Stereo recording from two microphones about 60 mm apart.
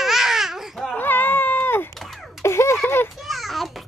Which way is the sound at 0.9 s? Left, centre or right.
Left.